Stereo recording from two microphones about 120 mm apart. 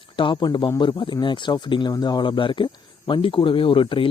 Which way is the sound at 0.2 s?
40° left (ahead or behind).